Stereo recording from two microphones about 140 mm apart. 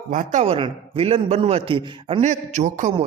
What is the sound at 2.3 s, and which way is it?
Speech, 55° right (ahead or behind).